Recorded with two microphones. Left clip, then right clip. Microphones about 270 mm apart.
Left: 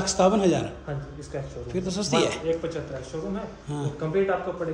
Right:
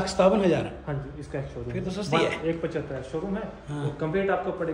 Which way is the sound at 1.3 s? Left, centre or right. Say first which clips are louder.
Even; right.